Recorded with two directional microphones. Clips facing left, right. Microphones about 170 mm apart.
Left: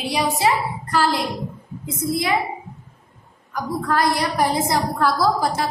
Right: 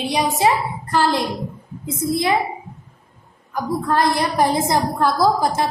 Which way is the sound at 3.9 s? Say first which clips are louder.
Right 1 dB; 25° right (ahead or behind).